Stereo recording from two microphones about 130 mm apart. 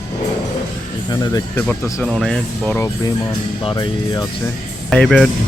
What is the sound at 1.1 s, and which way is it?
Speech, 30° left (ahead or behind).